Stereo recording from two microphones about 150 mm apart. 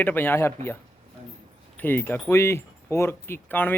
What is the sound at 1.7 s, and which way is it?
Speech, 15° left (ahead or behind).